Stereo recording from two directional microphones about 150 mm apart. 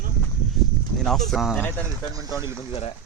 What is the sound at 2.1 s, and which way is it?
Speech, 25° right (ahead or behind).